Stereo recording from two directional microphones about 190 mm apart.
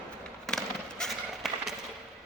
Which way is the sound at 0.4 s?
5° left (ahead or behind).